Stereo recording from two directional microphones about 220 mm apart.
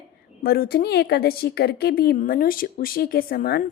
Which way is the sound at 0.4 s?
45° left (ahead or behind).